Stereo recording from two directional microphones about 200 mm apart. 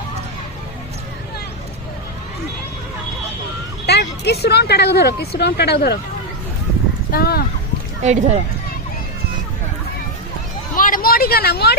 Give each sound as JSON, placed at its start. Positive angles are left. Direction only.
{"t": 3.8, "sound": "speech", "side_deg": 55}
{"t": 7.1, "sound": "speech", "side_deg": 50}
{"t": 8.0, "sound": "speech", "side_deg": -35}
{"t": 10.8, "sound": "a sound", "side_deg": 45}